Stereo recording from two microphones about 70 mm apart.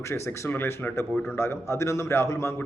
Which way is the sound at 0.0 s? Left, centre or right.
Left.